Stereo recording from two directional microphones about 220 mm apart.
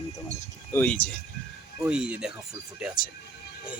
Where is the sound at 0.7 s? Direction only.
5° left (ahead or behind).